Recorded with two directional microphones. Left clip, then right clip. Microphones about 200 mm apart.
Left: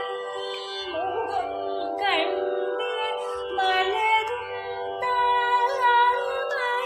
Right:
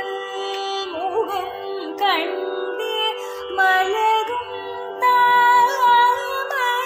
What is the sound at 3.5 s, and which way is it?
Music, 20° right (ahead or behind).